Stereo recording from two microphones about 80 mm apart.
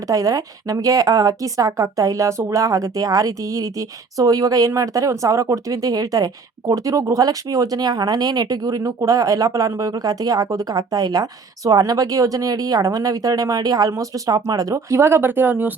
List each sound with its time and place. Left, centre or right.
0.1 s speech: right